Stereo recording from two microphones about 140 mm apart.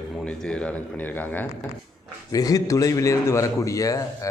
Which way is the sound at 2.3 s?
25° left (ahead or behind).